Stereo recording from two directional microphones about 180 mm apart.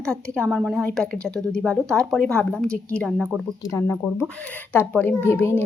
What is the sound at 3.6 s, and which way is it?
A woman's voice, 15° left (ahead or behind).